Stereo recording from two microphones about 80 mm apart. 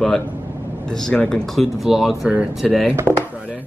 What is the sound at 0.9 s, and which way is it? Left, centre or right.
Speech, centre.